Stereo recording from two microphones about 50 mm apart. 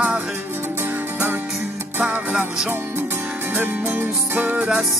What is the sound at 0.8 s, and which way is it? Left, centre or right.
Music, right.